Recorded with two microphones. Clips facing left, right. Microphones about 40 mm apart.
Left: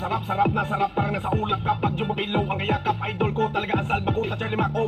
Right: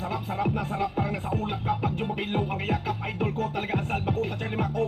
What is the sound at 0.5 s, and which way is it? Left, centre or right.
Music, left.